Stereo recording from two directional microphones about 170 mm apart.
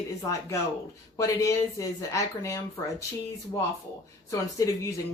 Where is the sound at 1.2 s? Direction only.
20° left (ahead or behind).